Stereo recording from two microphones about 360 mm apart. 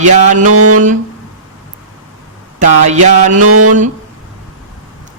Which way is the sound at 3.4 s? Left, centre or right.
Right.